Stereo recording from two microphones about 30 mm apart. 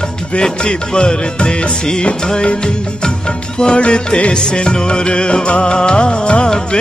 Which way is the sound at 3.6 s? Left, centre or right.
Left.